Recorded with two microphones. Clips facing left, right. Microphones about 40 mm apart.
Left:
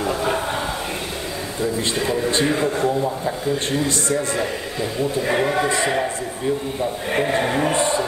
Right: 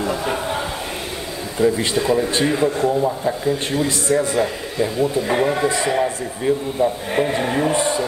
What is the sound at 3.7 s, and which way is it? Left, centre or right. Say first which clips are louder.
Speech: right 3 dB; right.